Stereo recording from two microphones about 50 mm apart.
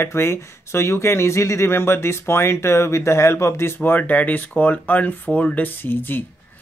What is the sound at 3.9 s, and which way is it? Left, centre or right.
Speech, left.